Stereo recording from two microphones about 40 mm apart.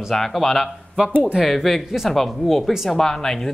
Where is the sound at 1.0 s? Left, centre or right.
Right.